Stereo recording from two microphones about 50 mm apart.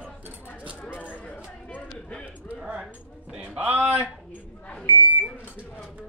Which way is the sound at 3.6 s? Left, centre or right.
Right.